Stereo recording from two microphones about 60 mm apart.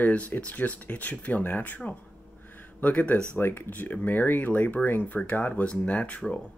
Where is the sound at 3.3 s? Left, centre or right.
Left; by 6.4 s centre.